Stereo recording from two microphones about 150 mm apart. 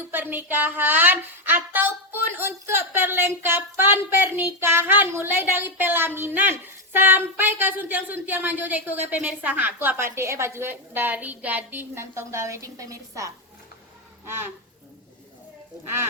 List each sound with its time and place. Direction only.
0.1 s speech: 15° right (ahead or behind)